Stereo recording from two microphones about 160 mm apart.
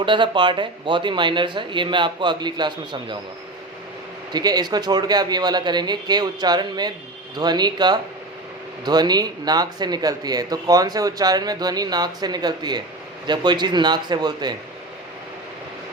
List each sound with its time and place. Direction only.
0.0 s speech: 30° right (ahead or behind)
4.3 s speech: 25° right (ahead or behind)